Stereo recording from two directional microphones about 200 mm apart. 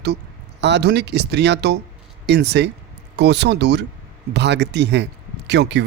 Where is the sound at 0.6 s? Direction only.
60° right (ahead or behind).